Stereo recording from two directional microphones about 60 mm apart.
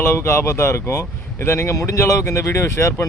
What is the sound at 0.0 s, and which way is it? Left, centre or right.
Speech, left.